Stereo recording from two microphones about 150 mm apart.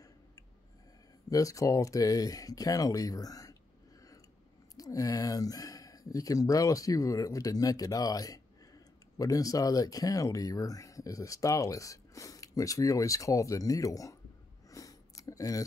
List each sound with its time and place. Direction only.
1.3 s speech: 20° left (ahead or behind)
4.7 s speech: 25° left (ahead or behind)
14.7 s a sound: 20° left (ahead or behind)